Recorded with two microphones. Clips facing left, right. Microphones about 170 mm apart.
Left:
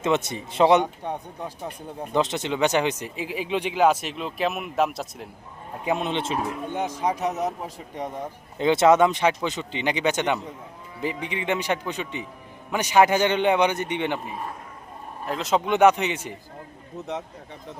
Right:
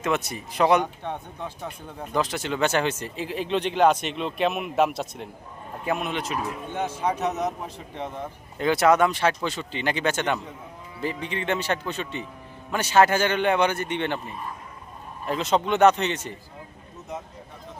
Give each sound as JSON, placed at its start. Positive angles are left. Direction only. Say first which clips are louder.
{"t": 0.0, "sound": "speech", "louder": "left 3 dB", "side_deg": 25}
{"t": 5.8, "sound": "speech", "louder": "left 2 dB", "side_deg": 25}
{"t": 6.7, "sound": "speech", "louder": "even", "side_deg": 15}
{"t": 15.3, "sound": "speech", "louder": "right 1 dB", "side_deg": 0}
{"t": 15.6, "sound": "speech", "louder": "left 1 dB", "side_deg": 15}